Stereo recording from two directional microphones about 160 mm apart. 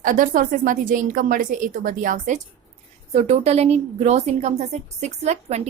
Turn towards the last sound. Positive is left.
turn(degrees=-45)  # may be behind; listen again after turning